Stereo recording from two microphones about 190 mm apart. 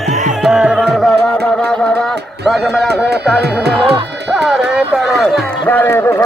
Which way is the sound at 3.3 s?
Centre (ahead or behind).